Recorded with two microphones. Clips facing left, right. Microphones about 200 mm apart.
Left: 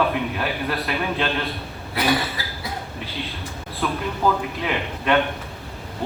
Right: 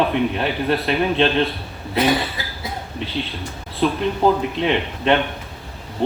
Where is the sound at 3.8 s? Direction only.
25° right (ahead or behind).